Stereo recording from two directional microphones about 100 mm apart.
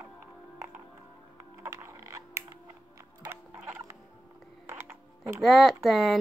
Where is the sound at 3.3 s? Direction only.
25° right (ahead or behind).